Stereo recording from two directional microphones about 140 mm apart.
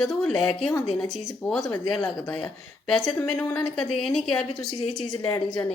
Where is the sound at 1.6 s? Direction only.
20° left (ahead or behind).